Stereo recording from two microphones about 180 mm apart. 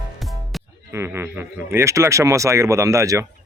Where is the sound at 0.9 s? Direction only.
15° right (ahead or behind).